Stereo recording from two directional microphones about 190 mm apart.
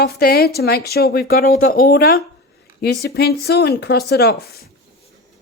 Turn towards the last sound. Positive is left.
turn(degrees=55)  # may be behind; listen again after turning